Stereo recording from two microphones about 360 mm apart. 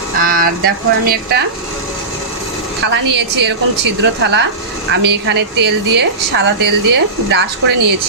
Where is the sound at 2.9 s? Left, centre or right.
Right.